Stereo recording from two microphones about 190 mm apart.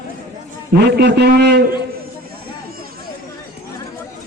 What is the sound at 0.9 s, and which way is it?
Speech, 60° right (ahead or behind).